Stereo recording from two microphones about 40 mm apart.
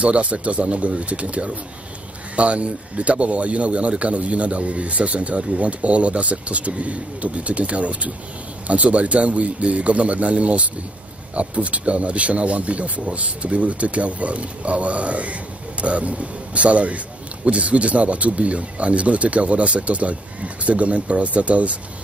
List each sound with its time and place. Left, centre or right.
0.0 s speech: right